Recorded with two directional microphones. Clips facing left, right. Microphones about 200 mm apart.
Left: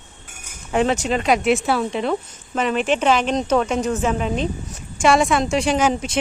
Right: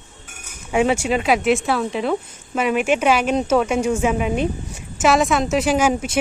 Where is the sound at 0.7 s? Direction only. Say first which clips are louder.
Right 1 dB; 10° right (ahead or behind).